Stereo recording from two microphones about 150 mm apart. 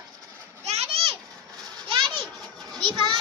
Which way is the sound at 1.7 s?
35° right (ahead or behind).